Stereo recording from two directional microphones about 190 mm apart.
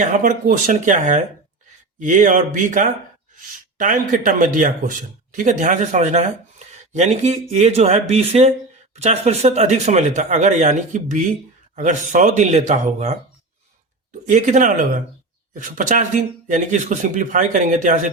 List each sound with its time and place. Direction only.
0.0 s speech: 45° right (ahead or behind)
14.3 s speech: 40° right (ahead or behind)